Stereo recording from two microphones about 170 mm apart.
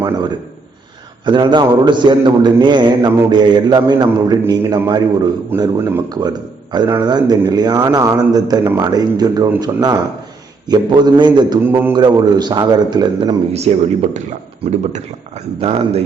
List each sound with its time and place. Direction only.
0.0 s a man's voice: 25° right (ahead or behind)
11.6 s a man's voice: 10° right (ahead or behind)
11.9 s speech: 25° right (ahead or behind)
13.5 s speech: 40° right (ahead or behind)